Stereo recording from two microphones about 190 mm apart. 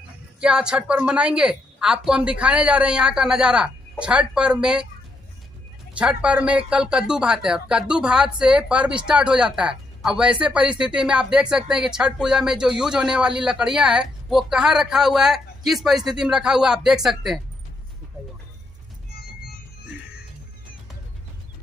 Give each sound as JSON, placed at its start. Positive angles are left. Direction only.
{"t": 0.4, "sound": "speech", "side_deg": -5}
{"t": 5.9, "sound": "speech", "side_deg": -5}